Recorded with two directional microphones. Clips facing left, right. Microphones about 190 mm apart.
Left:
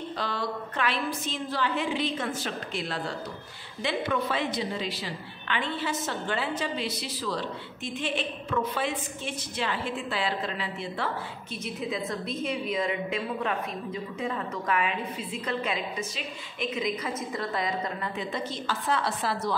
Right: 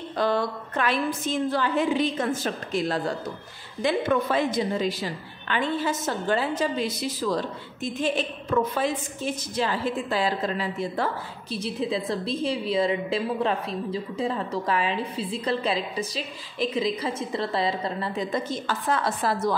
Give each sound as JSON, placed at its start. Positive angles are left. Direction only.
{"t": 0.2, "sound": "a woman's voice", "side_deg": -50}
{"t": 11.5, "sound": "a woman's voice", "side_deg": -30}
{"t": 18.3, "sound": "a woman's voice", "side_deg": -50}